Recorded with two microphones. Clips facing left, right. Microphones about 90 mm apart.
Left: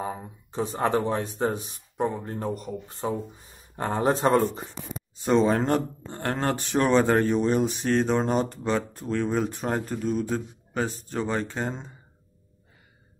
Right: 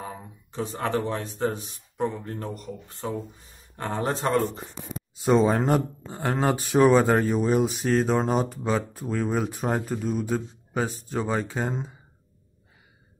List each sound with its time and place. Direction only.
0.0 s a sound: 25° left (ahead or behind)
1.5 s a man's voice: 15° left (ahead or behind)
5.1 s speech: 5° right (ahead or behind)